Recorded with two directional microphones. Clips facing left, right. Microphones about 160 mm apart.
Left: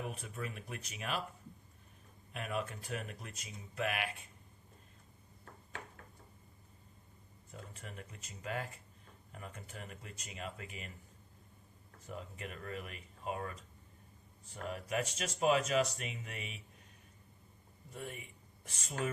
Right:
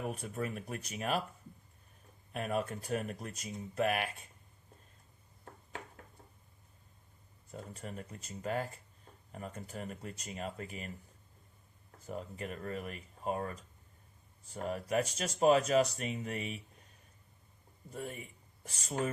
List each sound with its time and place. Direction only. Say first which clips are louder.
0.1 s speech: right 6 dB; 45° right (ahead or behind)
2.3 s speech: right 5 dB; 45° right (ahead or behind)
7.5 s speech: right 6 dB; 40° right (ahead or behind)
12.0 s speech: right 5 dB; 40° right (ahead or behind)
17.9 s speech: right 4 dB; 40° right (ahead or behind)